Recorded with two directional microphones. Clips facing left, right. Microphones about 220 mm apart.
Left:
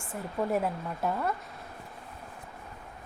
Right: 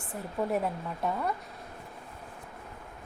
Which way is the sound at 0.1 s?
Centre (ahead or behind).